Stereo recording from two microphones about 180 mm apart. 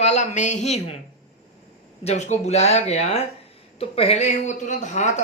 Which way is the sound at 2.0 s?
40° left (ahead or behind).